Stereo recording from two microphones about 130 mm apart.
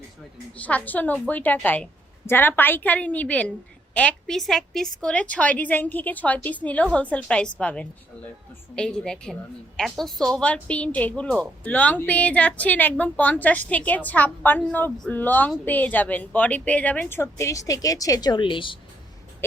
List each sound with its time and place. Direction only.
0.5 s a woman's voice: 10° left (ahead or behind); by 18.8 s 40° left (ahead or behind)